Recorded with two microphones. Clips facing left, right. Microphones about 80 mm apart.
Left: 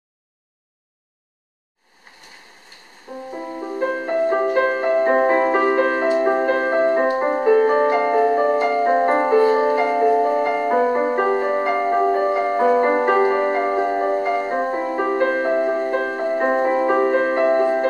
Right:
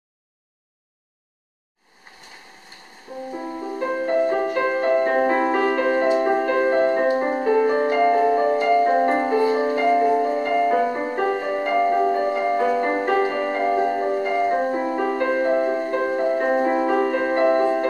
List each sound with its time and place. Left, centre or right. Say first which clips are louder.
3.3 s music: left 1 dB; centre
5.1 s music: left 3 dB; left
7.3 s music: left 3 dB; left; by 17.8 s centre